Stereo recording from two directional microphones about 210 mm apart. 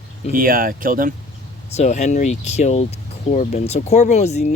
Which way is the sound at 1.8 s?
35° left (ahead or behind).